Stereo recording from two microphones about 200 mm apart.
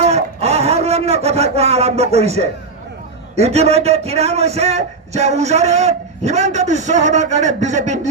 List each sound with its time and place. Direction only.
0.0 s a man's voice: 30° right (ahead or behind)